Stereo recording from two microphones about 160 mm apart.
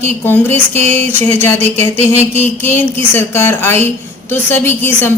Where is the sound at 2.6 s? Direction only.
15° left (ahead or behind).